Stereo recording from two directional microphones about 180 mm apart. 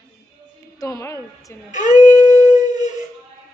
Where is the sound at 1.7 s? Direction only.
45° left (ahead or behind).